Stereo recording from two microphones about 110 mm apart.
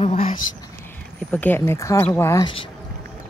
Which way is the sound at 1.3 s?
15° left (ahead or behind).